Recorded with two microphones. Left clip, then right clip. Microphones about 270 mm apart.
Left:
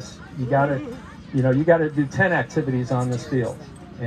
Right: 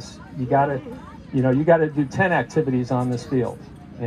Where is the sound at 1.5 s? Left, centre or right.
Right.